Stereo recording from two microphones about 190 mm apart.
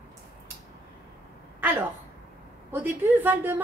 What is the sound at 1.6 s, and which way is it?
A woman's voice, 10° right (ahead or behind).